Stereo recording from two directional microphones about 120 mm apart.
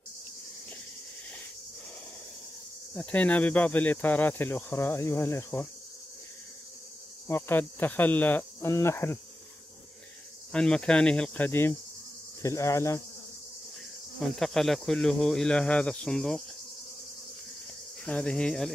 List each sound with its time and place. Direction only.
2.9 s speech: 10° left (ahead or behind)
7.2 s cricket: 20° left (ahead or behind)
10.5 s speech: 5° left (ahead or behind)
12.4 s cricket: 25° left (ahead or behind)
14.2 s speech: 5° left (ahead or behind)
18.0 s speech: 10° left (ahead or behind)